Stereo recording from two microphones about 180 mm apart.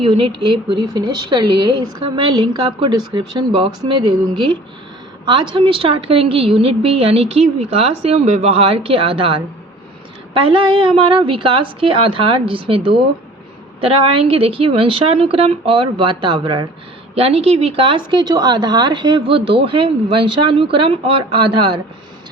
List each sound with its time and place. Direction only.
0.0 s speech: 30° right (ahead or behind)
5.2 s a woman's voice: 25° right (ahead or behind)